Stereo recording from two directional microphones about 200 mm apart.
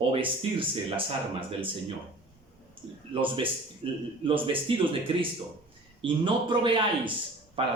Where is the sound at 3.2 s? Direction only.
25° right (ahead or behind).